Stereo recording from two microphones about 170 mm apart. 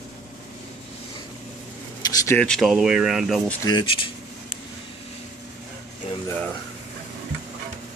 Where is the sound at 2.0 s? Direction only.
15° left (ahead or behind).